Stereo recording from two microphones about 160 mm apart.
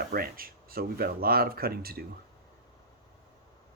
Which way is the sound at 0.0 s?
70° right (ahead or behind).